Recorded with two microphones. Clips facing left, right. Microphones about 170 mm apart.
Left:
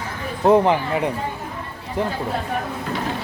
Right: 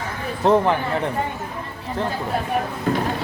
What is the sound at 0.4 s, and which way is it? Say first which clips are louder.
Speech: left 2 dB; 15° left (ahead or behind).